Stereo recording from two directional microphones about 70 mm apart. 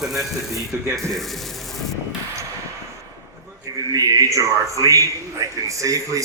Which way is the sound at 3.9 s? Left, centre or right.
Right.